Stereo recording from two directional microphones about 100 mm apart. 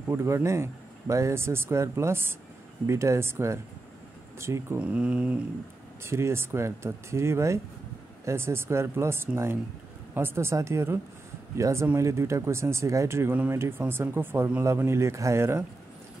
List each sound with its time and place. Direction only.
0.1 s speech: 30° right (ahead or behind)
4.7 s speech: 10° right (ahead or behind)
6.0 s speech: 25° right (ahead or behind)